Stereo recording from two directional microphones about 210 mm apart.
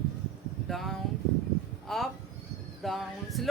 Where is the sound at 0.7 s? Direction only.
Centre (ahead or behind).